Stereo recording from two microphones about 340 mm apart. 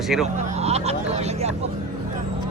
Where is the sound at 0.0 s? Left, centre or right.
Centre.